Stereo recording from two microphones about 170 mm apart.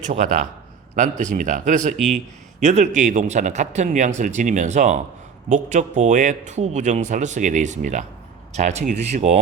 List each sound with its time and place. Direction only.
0.0 s speech: 45° right (ahead or behind)